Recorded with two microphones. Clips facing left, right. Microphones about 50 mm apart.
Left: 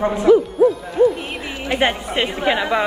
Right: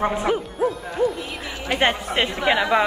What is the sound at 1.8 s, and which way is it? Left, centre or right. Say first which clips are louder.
Speech: left 1 dB; centre.